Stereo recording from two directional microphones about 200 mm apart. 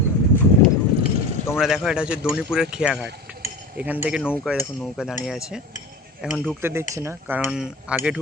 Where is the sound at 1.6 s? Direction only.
5° right (ahead or behind).